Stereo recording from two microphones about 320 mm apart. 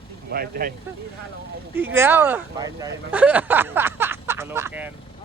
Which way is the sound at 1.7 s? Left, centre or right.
Centre.